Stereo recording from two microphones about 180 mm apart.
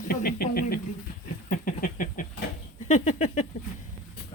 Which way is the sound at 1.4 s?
50° left (ahead or behind).